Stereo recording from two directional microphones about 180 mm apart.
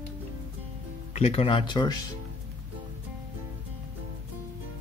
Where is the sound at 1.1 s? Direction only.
35° left (ahead or behind).